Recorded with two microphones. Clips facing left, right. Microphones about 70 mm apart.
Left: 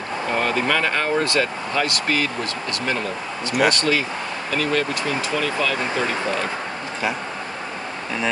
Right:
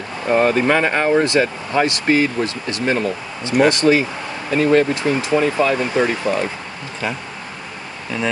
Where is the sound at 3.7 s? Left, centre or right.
Right.